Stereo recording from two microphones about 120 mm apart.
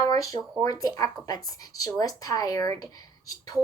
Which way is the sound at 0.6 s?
30° left (ahead or behind).